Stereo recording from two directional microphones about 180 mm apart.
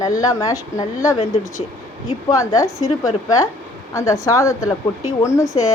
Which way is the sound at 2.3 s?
15° left (ahead or behind).